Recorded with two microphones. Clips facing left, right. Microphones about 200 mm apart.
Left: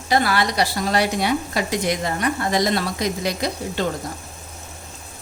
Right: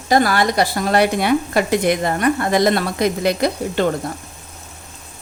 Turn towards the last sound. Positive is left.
turn(degrees=-55)  # may be behind; listen again after turning